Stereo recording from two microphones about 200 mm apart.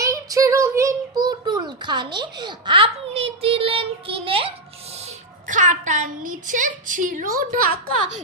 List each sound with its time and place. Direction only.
0.0 s a child's voice: 15° right (ahead or behind); by 7.6 s 45° right (ahead or behind)